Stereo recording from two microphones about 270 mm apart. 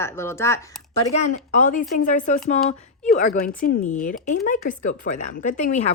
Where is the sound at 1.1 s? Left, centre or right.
Left.